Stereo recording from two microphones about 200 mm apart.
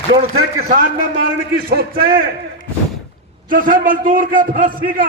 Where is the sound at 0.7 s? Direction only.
45° right (ahead or behind).